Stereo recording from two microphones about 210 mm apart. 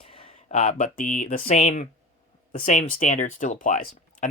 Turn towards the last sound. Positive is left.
turn(degrees=40)  # may be behind; listen again after turning